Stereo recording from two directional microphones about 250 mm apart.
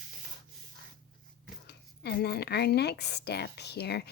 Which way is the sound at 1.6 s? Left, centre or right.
Left.